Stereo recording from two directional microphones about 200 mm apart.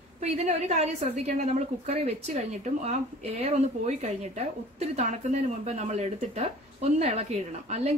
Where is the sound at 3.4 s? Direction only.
35° right (ahead or behind).